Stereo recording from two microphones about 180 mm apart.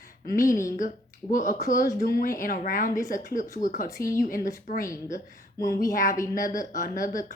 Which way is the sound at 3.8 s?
15° left (ahead or behind).